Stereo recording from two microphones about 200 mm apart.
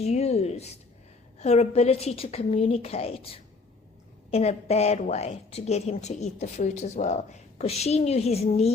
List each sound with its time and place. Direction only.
0.0 s a woman's voice: 35° left (ahead or behind)